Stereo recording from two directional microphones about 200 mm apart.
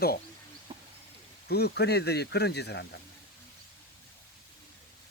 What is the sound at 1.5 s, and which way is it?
Speech, 55° left (ahead or behind).